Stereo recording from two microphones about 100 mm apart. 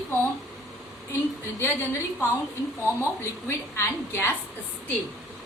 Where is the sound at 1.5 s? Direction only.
25° left (ahead or behind).